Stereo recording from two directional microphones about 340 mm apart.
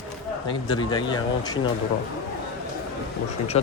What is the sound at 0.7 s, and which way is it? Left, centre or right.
Speech, centre.